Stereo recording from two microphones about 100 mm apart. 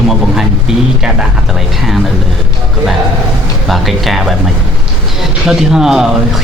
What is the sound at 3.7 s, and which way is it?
Speech, centre (ahead or behind).